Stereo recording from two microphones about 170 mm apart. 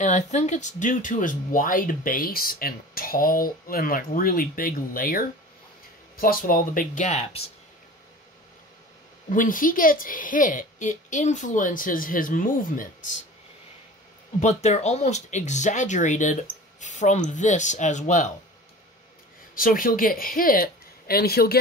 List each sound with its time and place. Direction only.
0.0 s a woman's voice: 45° left (ahead or behind)
9.3 s a woman's voice: 50° left (ahead or behind)
14.4 s a woman's voice: 40° left (ahead or behind)
19.5 s speech: 55° left (ahead or behind)